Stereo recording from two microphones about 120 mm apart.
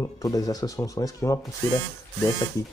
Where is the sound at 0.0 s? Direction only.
30° left (ahead or behind).